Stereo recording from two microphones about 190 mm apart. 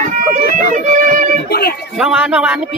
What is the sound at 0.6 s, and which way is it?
Music, 45° right (ahead or behind).